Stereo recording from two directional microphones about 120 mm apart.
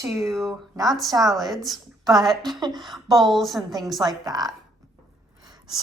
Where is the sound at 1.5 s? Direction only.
Centre (ahead or behind).